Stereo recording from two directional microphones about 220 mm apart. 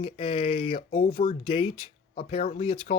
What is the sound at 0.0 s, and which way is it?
Speech, 25° left (ahead or behind).